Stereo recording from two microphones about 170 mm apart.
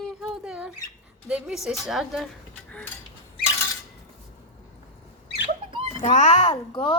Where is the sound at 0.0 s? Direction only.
5° right (ahead or behind).